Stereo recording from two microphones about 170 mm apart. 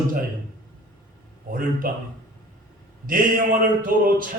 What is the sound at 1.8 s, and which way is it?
Speech, 55° right (ahead or behind).